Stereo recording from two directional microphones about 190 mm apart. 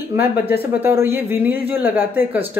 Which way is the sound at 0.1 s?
10° right (ahead or behind).